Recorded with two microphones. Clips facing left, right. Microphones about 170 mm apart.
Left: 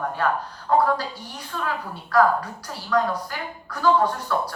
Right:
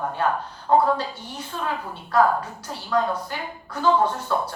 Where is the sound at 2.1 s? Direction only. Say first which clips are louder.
Left 1 dB; 25° right (ahead or behind).